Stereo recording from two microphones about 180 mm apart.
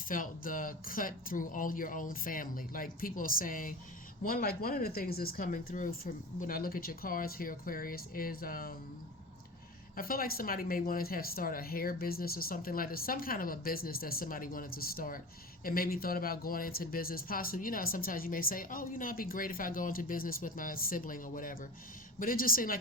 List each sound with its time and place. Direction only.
0.1 s speech: 50° left (ahead or behind)
9.9 s speech: 55° left (ahead or behind)